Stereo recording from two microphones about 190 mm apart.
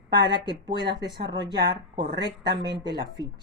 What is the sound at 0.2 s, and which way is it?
Speech, 25° right (ahead or behind).